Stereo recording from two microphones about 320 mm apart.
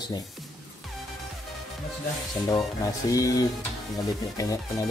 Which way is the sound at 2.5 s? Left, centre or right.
Centre.